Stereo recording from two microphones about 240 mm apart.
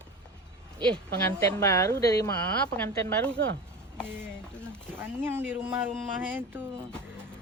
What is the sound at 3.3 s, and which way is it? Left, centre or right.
Speech, right.